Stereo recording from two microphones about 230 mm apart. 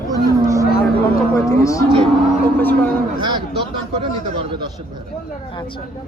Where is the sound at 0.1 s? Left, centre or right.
Centre.